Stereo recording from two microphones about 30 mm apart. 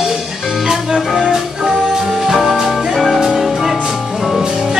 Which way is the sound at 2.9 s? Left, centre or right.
Centre.